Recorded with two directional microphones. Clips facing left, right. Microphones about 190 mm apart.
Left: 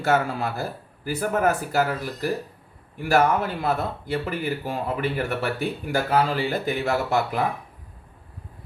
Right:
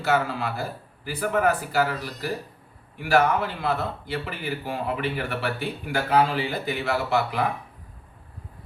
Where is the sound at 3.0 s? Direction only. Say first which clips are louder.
Left 1 dB; 45° left (ahead or behind).